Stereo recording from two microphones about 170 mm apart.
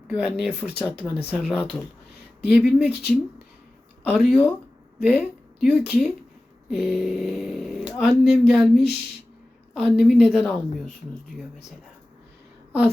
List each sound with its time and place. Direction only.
0.1 s speech: 5° right (ahead or behind)
2.9 s speech: 75° left (ahead or behind)
4.2 s speech: 5° left (ahead or behind)
5.0 s speech: 10° right (ahead or behind)
9.8 s speech: 5° right (ahead or behind)